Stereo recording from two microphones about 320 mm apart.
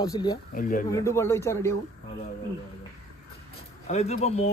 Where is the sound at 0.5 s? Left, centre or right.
Left.